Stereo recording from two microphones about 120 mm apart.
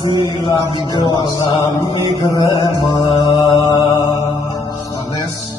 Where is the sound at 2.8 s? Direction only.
40° left (ahead or behind).